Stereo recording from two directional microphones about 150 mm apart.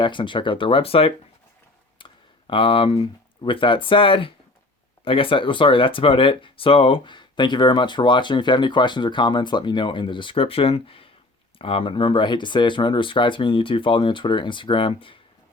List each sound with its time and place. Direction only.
0.0 s speech: 35° left (ahead or behind)